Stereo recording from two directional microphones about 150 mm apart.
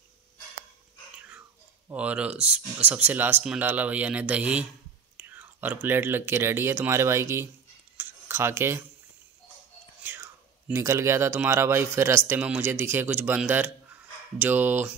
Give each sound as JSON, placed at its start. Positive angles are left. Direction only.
{"t": 1.9, "sound": "speech", "side_deg": -10}
{"t": 8.0, "sound": "a sound", "side_deg": -15}
{"t": 10.0, "sound": "speech", "side_deg": -15}